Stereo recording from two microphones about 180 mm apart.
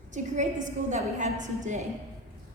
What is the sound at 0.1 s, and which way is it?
A woman's voice, 45° right (ahead or behind).